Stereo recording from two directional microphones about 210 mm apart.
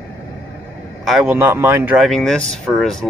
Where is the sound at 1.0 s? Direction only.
5° right (ahead or behind).